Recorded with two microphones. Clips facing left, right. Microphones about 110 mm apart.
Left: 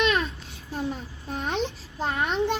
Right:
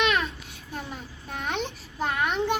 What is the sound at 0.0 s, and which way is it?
Babbling, 30° left (ahead or behind).